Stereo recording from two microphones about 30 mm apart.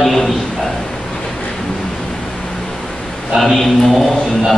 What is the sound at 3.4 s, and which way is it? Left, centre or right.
Speech, centre.